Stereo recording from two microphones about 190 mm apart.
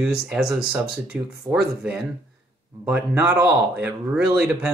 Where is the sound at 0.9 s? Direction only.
5° right (ahead or behind).